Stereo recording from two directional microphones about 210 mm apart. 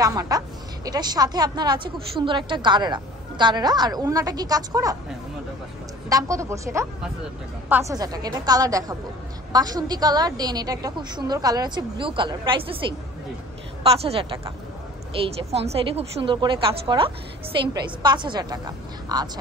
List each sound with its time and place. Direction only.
0.0 s a woman's voice: 20° right (ahead or behind)
6.0 s a woman's voice: 15° right (ahead or behind)